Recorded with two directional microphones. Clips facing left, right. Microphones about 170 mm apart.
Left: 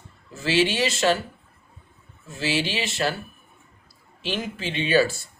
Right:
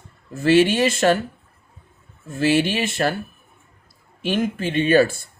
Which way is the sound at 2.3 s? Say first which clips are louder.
Right 7 dB; 55° right (ahead or behind).